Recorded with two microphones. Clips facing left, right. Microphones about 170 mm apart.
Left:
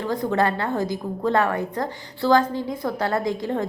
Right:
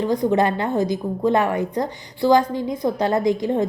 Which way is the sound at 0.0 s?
15° right (ahead or behind).